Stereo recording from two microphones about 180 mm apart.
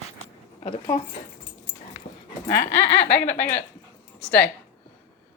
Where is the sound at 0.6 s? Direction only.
30° left (ahead or behind).